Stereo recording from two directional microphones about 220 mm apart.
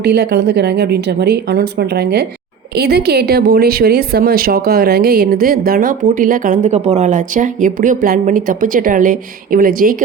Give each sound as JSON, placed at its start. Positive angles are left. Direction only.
{"t": 0.0, "sound": "a woman's voice", "side_deg": -50}